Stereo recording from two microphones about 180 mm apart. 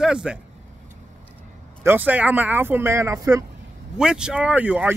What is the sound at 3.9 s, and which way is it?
Speech, 5° right (ahead or behind).